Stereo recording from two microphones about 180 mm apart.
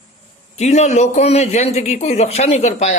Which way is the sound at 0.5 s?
40° left (ahead or behind).